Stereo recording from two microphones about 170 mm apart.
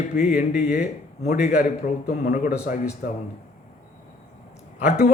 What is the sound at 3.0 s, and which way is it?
Speech, 65° left (ahead or behind).